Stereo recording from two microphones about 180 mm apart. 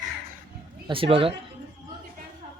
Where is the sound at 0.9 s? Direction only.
30° right (ahead or behind).